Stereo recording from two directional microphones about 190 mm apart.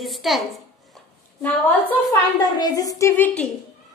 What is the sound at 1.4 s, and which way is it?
Speech, 10° left (ahead or behind).